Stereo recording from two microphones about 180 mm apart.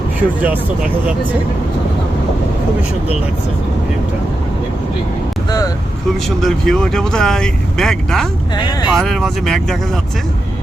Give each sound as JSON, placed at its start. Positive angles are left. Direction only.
{"t": 0.2, "sound": "speech", "side_deg": -10}
{"t": 5.5, "sound": "vehicle", "side_deg": 20}
{"t": 6.2, "sound": "speech", "side_deg": 0}
{"t": 8.5, "sound": "speech", "side_deg": 25}
{"t": 9.0, "sound": "speech", "side_deg": 0}